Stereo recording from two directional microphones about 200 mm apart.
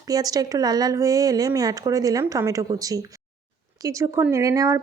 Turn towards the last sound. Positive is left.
turn(degrees=-15)  # may be behind; listen again after turning